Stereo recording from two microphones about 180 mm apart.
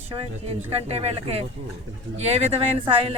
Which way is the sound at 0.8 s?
35° right (ahead or behind).